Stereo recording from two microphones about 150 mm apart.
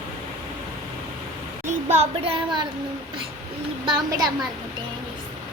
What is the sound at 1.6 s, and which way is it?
Speech, 45° right (ahead or behind).